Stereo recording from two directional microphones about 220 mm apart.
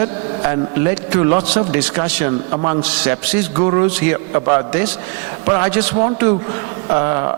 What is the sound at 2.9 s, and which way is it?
Speech, 10° right (ahead or behind).